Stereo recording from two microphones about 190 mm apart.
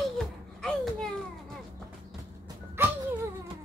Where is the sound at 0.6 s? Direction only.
5° left (ahead or behind).